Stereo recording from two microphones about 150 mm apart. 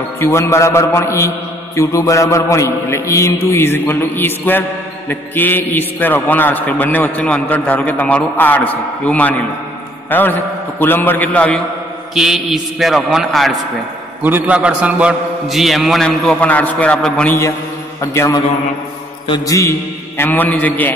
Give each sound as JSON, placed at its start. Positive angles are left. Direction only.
{"t": 0.2, "sound": "a man's voice", "side_deg": 20}
{"t": 14.2, "sound": "a man's voice", "side_deg": -10}
{"t": 18.0, "sound": "a man's voice", "side_deg": 20}
{"t": 19.2, "sound": "a man's voice", "side_deg": 25}